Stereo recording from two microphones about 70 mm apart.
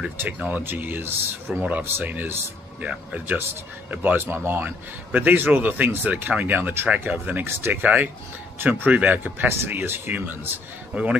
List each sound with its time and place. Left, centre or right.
0.2 s speech: right